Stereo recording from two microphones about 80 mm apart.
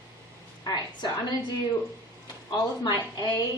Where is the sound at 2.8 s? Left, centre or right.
Left.